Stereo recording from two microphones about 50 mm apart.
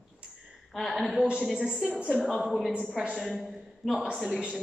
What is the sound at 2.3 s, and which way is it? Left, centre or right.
A woman's voice, centre.